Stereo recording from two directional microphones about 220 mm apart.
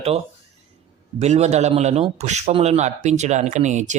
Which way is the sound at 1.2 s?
30° right (ahead or behind).